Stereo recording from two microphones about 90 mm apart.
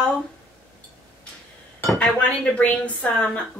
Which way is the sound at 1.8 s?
15° left (ahead or behind).